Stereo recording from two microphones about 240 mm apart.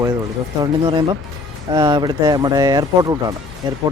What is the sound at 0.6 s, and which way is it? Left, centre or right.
Speech, centre.